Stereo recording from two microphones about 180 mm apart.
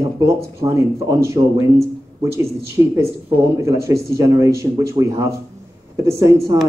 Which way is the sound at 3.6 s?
15° right (ahead or behind).